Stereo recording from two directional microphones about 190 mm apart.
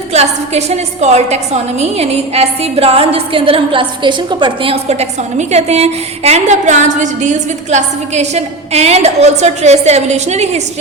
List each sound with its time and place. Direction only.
0.1 s a woman's voice: 35° right (ahead or behind)